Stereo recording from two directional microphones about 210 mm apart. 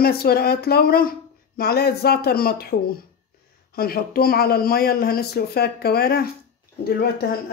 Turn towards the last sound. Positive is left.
turn(degrees=45)  # may be behind; listen again after turning